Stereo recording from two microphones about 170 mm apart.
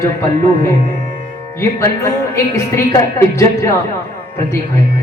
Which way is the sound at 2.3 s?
15° left (ahead or behind).